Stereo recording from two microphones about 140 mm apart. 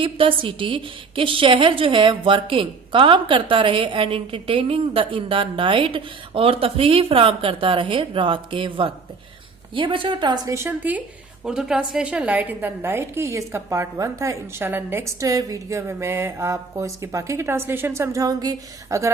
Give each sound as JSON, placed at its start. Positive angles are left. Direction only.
{"t": 0.0, "sound": "a woman's voice", "side_deg": -40}